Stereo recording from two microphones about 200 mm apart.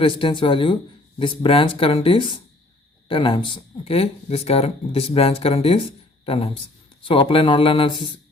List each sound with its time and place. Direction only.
0.0 s speech: 25° left (ahead or behind)